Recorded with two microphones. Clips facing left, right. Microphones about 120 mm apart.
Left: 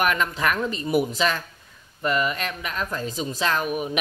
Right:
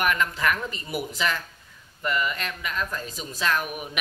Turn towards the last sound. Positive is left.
turn(degrees=25)  # may be behind; listen again after turning